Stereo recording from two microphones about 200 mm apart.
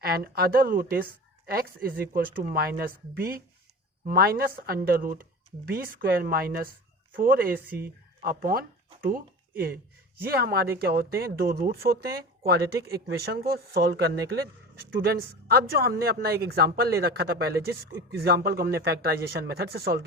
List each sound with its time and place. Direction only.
0.0 s a woman's voice: 50° right (ahead or behind)